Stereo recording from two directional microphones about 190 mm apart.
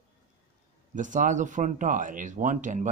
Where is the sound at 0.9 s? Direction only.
40° right (ahead or behind).